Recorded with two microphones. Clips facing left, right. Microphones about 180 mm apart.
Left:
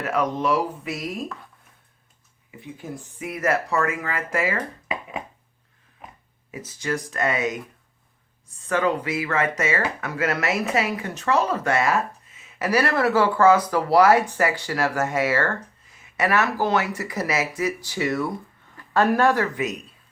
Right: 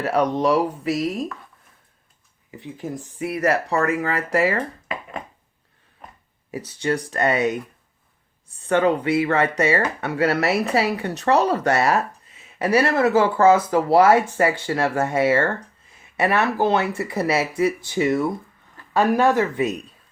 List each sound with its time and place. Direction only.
0.0 s speech: 35° right (ahead or behind)
3.2 s speech: 35° right (ahead or behind)
4.9 s a sound: 5° left (ahead or behind)
6.8 s speech: 35° right (ahead or behind); by 19.5 s 20° right (ahead or behind)